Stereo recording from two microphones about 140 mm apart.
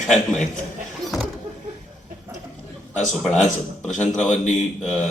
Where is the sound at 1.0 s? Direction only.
Centre (ahead or behind).